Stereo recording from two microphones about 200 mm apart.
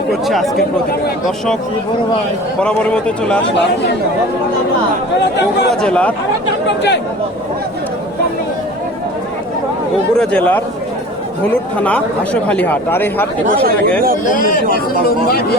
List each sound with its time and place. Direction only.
0.1 s a man's voice: centre (ahead or behind)
2.6 s a man's voice: 5° left (ahead or behind)
5.8 s a man's voice: 5° left (ahead or behind)
10.2 s speech: 5° left (ahead or behind)
11.8 s speech: 5° left (ahead or behind)
13.7 s speech: 50° right (ahead or behind)
14.3 s speech: 45° left (ahead or behind)